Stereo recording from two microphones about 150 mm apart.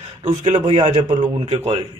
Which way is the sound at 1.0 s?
35° right (ahead or behind).